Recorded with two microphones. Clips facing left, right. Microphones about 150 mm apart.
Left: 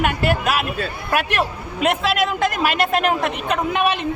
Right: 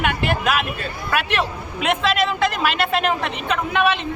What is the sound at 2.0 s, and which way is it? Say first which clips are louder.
Speech: even; 10° left (ahead or behind).